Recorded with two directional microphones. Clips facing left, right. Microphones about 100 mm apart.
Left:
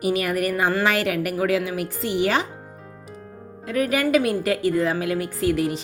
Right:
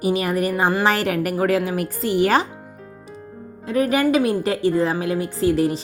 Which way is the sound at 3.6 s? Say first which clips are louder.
Right 3 dB; 30° right (ahead or behind).